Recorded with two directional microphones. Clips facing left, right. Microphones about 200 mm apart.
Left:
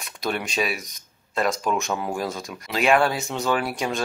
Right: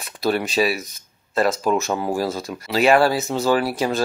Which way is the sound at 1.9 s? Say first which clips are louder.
Right 4 dB; 35° right (ahead or behind).